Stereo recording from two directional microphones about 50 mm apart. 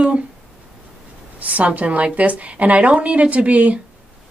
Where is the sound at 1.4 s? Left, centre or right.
Right.